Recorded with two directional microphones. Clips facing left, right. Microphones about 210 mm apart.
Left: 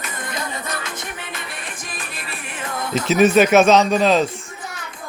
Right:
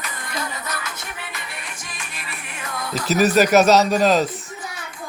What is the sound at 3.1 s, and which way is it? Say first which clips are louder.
Speech: left 2 dB; centre (ahead or behind).